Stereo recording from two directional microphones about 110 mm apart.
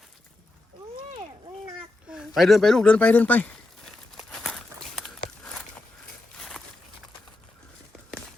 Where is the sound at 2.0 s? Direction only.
5° right (ahead or behind); by 3.5 s 15° left (ahead or behind).